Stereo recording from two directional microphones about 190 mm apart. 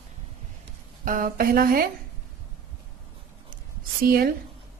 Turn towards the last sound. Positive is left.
turn(degrees=-55)  # may be behind; listen again after turning